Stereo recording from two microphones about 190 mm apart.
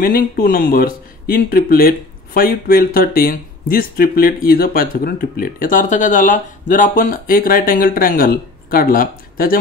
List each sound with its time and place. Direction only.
0.0 s speech: 50° left (ahead or behind)